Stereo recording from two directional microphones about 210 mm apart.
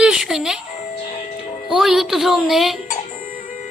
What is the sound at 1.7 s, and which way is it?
A woman's voice, centre (ahead or behind).